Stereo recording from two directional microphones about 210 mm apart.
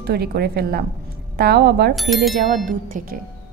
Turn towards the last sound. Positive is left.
turn(degrees=-40)  # may be behind; listen again after turning